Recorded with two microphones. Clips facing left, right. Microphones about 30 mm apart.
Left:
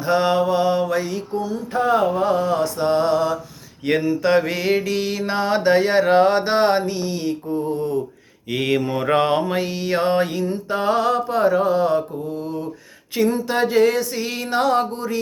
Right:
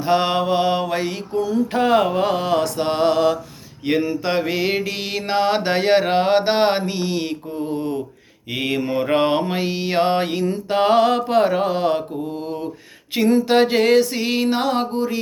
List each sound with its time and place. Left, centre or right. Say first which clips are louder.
0.0 s mantra: even; right
1.7 s mantra: even; right
3.9 s mantra: left 2 dB; centre; by 7.1 s right
7.1 s mantra: left 1 dB; right
8.4 s mantra: left 2 dB; centre; by 10.4 s right
10.7 s mantra: right 4 dB; right
14.5 s music: left 1 dB; right